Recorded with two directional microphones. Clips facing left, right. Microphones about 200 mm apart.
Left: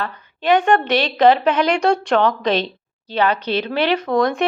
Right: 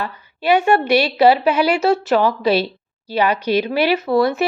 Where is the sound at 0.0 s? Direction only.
10° right (ahead or behind).